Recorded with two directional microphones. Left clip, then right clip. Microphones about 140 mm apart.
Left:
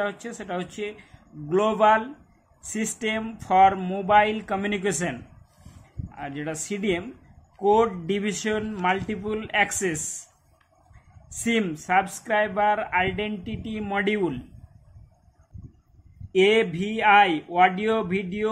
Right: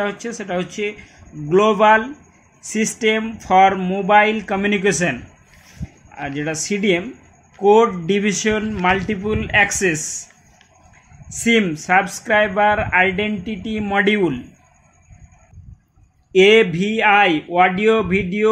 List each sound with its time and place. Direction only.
0.0 s speech: 40° right (ahead or behind)
6.1 s speech: 40° right (ahead or behind)
11.2 s speech: 40° right (ahead or behind)
16.3 s speech: 40° right (ahead or behind)